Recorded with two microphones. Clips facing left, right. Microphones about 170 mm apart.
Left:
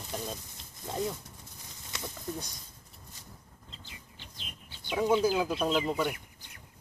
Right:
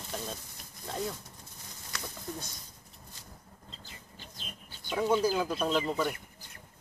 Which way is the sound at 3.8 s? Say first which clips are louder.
Right 1 dB; 40° right (ahead or behind).